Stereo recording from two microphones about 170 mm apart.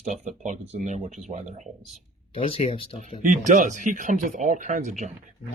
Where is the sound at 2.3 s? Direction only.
35° left (ahead or behind).